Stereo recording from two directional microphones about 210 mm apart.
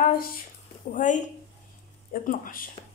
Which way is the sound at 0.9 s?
35° left (ahead or behind).